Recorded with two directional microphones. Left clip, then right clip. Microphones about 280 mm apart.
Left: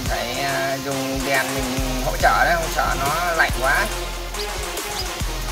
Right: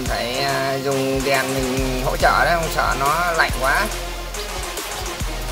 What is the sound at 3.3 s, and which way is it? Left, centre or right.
Music, right.